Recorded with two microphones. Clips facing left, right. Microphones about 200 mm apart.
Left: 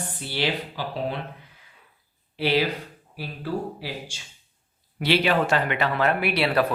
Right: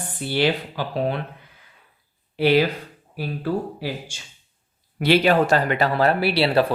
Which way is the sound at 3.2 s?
50° right (ahead or behind).